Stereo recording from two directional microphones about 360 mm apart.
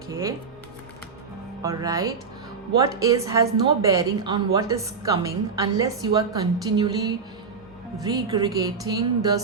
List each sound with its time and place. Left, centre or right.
0.1 s speech: centre
1.6 s a woman's voice: centre